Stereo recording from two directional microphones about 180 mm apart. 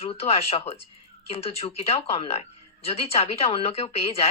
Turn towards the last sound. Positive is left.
turn(degrees=35)  # may be behind; listen again after turning